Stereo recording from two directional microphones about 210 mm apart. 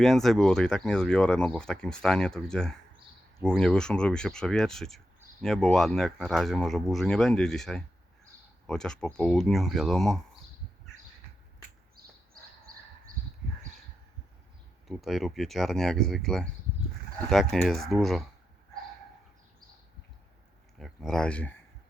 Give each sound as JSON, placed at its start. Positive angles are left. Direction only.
{"t": 0.0, "sound": "speech", "side_deg": 0}
{"t": 12.0, "sound": "a sound", "side_deg": -45}
{"t": 14.8, "sound": "speech", "side_deg": 0}
{"t": 20.7, "sound": "speech", "side_deg": 0}